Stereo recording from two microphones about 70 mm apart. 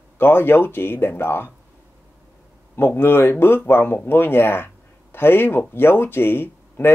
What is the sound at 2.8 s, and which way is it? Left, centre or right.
Speech, left.